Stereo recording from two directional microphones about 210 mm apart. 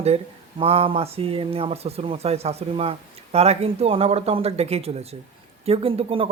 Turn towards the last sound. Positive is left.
turn(degrees=-25)  # may be behind; listen again after turning